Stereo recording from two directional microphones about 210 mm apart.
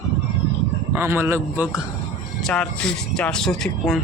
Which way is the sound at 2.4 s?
5° left (ahead or behind).